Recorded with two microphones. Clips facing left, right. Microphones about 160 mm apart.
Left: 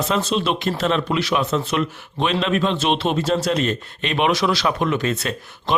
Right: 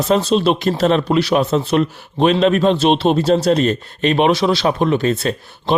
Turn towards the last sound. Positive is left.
turn(degrees=-35)  # may be behind; listen again after turning